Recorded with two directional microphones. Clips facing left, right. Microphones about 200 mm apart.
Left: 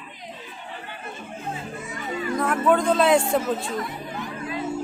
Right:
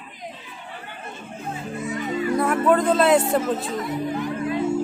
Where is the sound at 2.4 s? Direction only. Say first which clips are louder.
Right 1 dB; 10° right (ahead or behind).